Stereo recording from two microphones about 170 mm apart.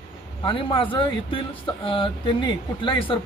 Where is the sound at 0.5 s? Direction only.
30° left (ahead or behind).